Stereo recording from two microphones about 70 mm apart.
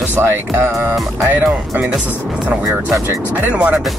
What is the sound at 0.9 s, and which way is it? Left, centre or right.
Speech, centre.